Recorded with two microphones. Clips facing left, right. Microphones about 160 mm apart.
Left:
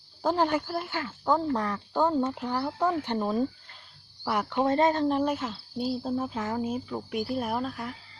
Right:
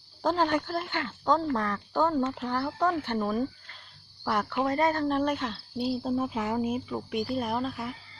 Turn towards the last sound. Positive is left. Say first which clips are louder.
# even
turn(degrees=0)  # may be behind; listen again after turning